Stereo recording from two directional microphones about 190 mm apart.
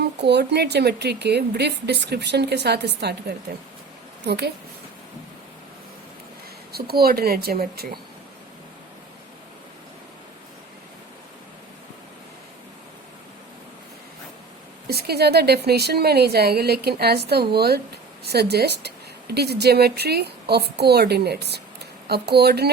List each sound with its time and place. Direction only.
0.0 s a woman's voice: 60° right (ahead or behind)
6.7 s speech: 55° right (ahead or behind)
14.8 s a woman's voice: 55° right (ahead or behind)